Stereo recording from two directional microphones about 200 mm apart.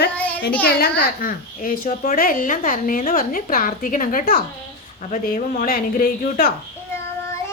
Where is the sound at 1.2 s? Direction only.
45° left (ahead or behind).